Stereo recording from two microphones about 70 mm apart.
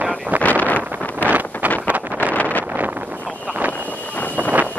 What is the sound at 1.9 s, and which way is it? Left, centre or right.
Wind noise, right.